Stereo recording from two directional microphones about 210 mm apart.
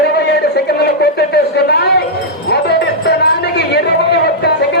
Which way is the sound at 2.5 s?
55° left (ahead or behind).